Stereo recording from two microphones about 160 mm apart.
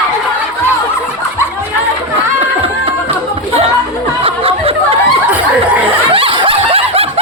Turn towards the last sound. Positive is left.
turn(degrees=-35)  # may be behind; listen again after turning